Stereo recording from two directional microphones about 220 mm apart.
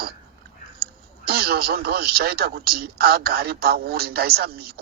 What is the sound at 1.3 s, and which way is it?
Speech, 45° right (ahead or behind).